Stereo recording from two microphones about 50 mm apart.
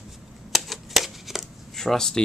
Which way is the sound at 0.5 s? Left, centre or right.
Centre.